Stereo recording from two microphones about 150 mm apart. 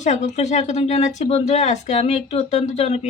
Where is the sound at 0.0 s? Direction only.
50° left (ahead or behind).